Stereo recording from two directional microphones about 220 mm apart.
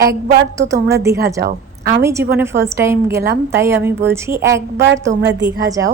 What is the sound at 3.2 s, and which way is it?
Speech, 50° right (ahead or behind).